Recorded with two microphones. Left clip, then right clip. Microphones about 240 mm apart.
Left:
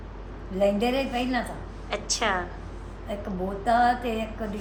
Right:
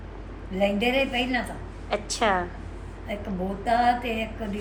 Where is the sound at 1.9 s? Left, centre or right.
Centre.